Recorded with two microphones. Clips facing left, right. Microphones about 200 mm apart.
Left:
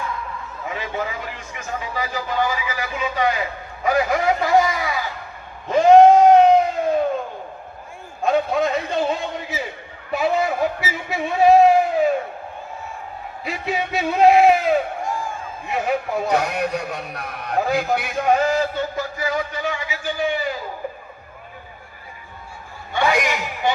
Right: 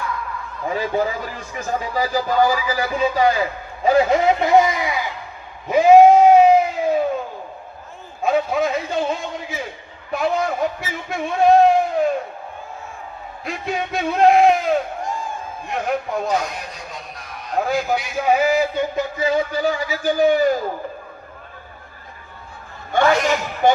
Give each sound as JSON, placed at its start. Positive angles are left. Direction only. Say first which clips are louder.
{"t": 0.6, "sound": "a man's voice", "louder": "right 6 dB", "side_deg": -35}
{"t": 5.6, "sound": "a sound", "louder": "right 1 dB", "side_deg": -10}
{"t": 8.2, "sound": "a man's voice", "louder": "even", "side_deg": 0}
{"t": 13.4, "sound": "a man's voice", "louder": "even", "side_deg": 5}
{"t": 15.0, "sound": "a sound", "louder": "left 1 dB", "side_deg": -15}
{"t": 15.6, "sound": "a man's voice", "louder": "left 1 dB", "side_deg": 5}
{"t": 16.3, "sound": "a man's voice", "louder": "left 3 dB", "side_deg": 65}
{"t": 17.6, "sound": "a man's voice", "louder": "even", "side_deg": 0}
{"t": 23.0, "sound": "a man's voice", "louder": "right 3 dB", "side_deg": 15}
{"t": 23.6, "sound": "speech", "louder": "right 6 dB", "side_deg": -45}